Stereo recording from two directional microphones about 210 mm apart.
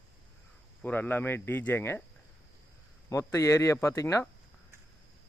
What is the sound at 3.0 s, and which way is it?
Speech, 15° left (ahead or behind).